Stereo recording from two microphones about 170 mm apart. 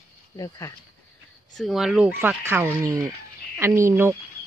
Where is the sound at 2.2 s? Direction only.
15° right (ahead or behind).